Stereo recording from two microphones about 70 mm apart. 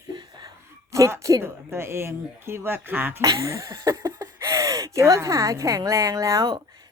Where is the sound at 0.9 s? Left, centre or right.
Right.